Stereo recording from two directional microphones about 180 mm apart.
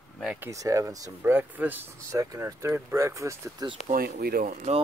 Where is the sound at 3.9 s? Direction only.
55° right (ahead or behind).